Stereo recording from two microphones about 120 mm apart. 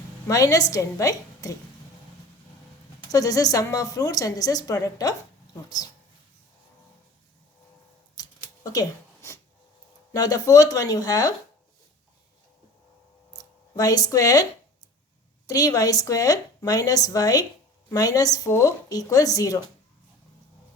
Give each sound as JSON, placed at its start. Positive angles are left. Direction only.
{"t": 0.3, "sound": "a woman's voice", "side_deg": 30}
{"t": 3.1, "sound": "a woman's voice", "side_deg": 30}
{"t": 8.1, "sound": "scissors", "side_deg": 30}
{"t": 10.1, "sound": "a woman's voice", "side_deg": 30}
{"t": 13.3, "sound": "a sound", "side_deg": 30}
{"t": 15.4, "sound": "a woman's voice", "side_deg": 30}